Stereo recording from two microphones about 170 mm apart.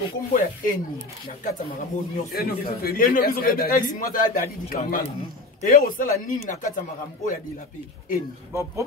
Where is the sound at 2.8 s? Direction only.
60° left (ahead or behind).